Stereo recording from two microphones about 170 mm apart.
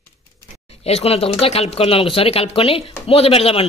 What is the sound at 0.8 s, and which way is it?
A woman's voice, 35° left (ahead or behind).